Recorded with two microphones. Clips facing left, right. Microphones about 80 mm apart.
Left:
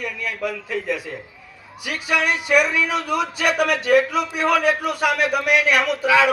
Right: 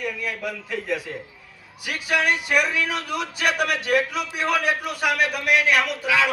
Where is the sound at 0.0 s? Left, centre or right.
Left.